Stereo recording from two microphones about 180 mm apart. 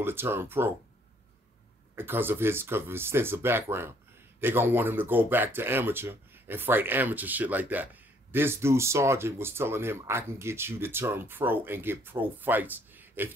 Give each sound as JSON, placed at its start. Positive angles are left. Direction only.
{"t": 0.0, "sound": "speech", "side_deg": -10}
{"t": 2.0, "sound": "speech", "side_deg": -10}